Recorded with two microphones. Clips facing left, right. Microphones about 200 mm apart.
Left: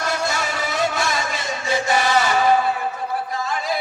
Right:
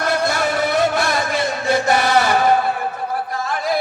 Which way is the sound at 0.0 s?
60° right (ahead or behind).